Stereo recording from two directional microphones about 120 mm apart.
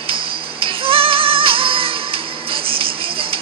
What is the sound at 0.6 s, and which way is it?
Music, 50° right (ahead or behind).